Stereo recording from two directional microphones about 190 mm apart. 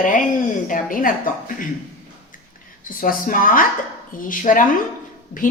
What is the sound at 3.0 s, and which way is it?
A woman's voice, 45° left (ahead or behind).